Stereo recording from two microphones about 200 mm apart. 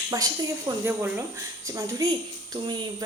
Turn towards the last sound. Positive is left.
turn(degrees=-20)  # may be behind; listen again after turning